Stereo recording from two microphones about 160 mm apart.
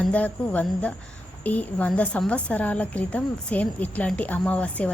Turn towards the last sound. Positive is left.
turn(degrees=5)  # may be behind; listen again after turning